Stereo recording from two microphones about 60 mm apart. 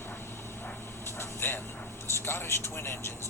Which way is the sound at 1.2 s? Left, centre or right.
Left.